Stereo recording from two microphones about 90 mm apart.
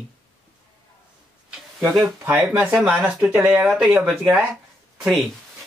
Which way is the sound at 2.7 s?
Centre (ahead or behind).